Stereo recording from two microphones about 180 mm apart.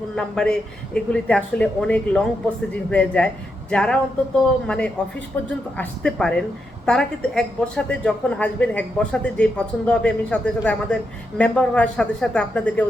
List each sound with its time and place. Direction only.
0.2 s a woman's voice: 5° left (ahead or behind)